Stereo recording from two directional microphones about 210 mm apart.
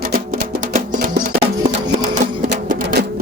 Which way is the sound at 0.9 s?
40° right (ahead or behind).